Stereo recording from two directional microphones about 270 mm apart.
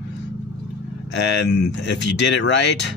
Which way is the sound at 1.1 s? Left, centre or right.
Left.